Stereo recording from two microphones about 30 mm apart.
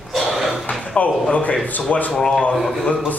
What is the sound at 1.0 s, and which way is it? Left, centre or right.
Speech, left.